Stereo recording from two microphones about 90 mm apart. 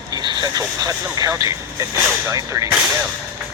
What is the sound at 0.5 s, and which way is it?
Speech, 45° right (ahead or behind).